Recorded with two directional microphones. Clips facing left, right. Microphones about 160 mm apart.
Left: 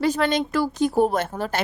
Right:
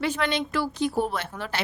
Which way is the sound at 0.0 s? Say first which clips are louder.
Left 5 dB; 40° left (ahead or behind).